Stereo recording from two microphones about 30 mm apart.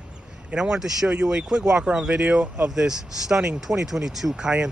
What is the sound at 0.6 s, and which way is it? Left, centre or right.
Speech, centre.